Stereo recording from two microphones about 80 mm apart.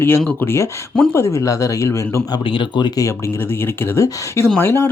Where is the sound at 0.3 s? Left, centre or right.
Left.